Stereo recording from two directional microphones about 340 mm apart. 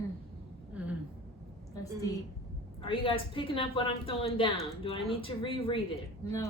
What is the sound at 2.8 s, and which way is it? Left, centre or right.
A woman's voice, centre.